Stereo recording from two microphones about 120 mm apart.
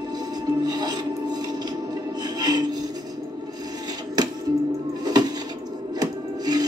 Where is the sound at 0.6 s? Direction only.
35° right (ahead or behind).